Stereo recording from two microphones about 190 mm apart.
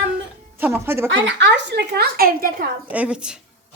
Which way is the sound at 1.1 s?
70° right (ahead or behind).